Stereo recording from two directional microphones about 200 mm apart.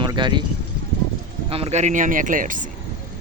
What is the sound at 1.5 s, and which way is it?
Speech, 30° right (ahead or behind).